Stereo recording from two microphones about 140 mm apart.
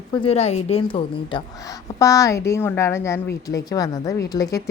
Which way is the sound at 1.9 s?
20° left (ahead or behind).